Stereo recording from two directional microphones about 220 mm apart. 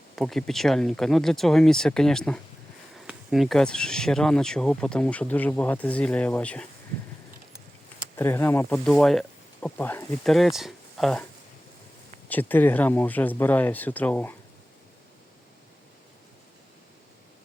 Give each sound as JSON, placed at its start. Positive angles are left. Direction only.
{"t": 0.2, "sound": "speech", "side_deg": 0}
{"t": 8.1, "sound": "speech", "side_deg": 10}
{"t": 12.3, "sound": "speech", "side_deg": 10}